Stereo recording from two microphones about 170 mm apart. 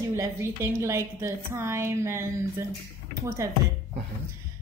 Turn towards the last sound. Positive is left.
turn(degrees=-20)  # may be behind; listen again after turning